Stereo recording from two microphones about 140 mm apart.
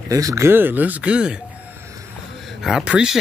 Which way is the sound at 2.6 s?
5° right (ahead or behind).